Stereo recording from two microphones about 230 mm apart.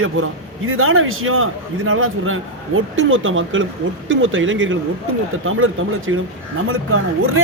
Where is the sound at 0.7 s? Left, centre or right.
Right.